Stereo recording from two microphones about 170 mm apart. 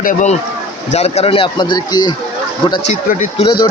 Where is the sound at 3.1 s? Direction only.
50° left (ahead or behind).